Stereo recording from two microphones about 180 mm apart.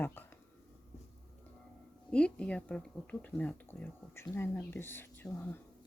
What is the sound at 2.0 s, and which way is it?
Speech, 5° left (ahead or behind).